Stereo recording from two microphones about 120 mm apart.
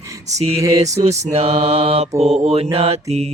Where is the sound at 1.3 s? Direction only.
55° right (ahead or behind).